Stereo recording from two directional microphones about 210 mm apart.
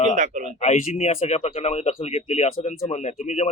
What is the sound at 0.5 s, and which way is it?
Speech, 30° left (ahead or behind).